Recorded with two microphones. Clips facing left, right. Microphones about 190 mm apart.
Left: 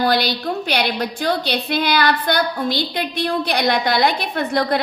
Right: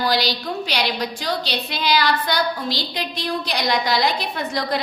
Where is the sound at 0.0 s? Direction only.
55° left (ahead or behind).